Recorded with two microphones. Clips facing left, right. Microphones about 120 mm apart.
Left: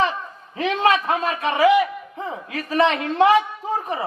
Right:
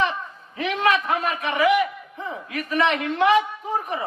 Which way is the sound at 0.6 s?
30° left (ahead or behind).